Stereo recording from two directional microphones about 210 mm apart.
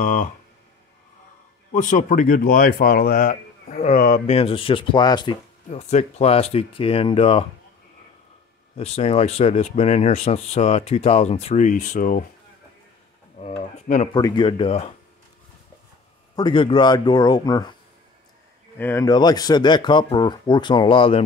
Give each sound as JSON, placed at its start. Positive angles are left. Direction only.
{"t": 0.0, "sound": "speech", "side_deg": 40}
{"t": 1.7, "sound": "speech", "side_deg": 35}
{"t": 4.4, "sound": "speech", "side_deg": 25}
{"t": 8.7, "sound": "speech", "side_deg": 30}
{"t": 14.1, "sound": "speech", "side_deg": 20}
{"t": 16.3, "sound": "speech", "side_deg": 20}
{"t": 18.8, "sound": "speech", "side_deg": 10}